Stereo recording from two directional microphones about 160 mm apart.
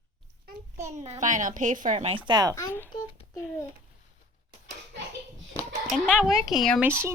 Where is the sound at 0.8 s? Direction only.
45° right (ahead or behind).